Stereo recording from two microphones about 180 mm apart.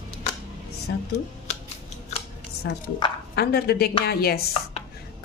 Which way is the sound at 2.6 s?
65° left (ahead or behind).